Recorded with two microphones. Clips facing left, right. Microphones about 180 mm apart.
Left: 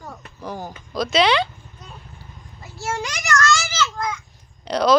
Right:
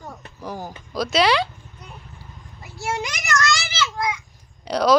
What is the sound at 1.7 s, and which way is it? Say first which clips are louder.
Vehicle: even; 15° right (ahead or behind).